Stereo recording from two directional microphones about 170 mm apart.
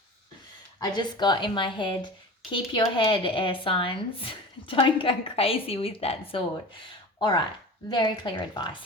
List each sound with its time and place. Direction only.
0.8 s a woman's voice: 25° left (ahead or behind)